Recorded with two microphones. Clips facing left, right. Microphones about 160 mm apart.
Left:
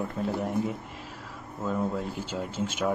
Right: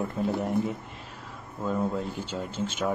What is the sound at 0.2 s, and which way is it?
Speech, centre (ahead or behind).